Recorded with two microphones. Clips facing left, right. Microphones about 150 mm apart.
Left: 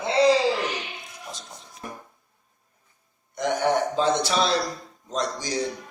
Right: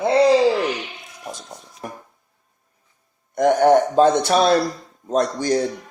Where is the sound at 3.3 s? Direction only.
50° right (ahead or behind).